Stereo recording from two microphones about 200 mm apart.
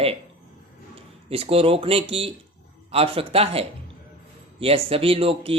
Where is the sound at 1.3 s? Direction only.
30° right (ahead or behind).